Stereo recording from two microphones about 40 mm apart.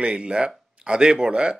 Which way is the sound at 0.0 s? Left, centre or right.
Right.